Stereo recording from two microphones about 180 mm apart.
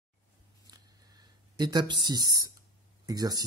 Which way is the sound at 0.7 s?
20° right (ahead or behind).